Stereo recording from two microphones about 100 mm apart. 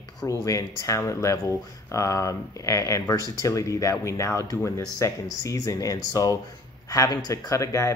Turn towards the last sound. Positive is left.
turn(degrees=30)  # may be behind; listen again after turning